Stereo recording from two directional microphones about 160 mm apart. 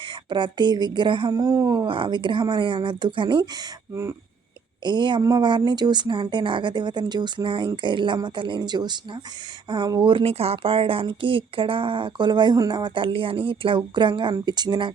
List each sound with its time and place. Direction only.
0.3 s speech: 30° right (ahead or behind)
4.8 s speech: 30° right (ahead or behind)